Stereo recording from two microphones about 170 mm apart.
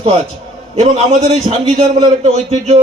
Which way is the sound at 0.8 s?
40° right (ahead or behind).